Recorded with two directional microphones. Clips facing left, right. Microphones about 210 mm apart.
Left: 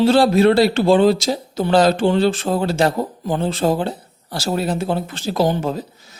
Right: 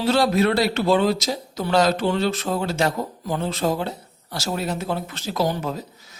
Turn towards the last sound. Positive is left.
turn(degrees=30)  # may be behind; listen again after turning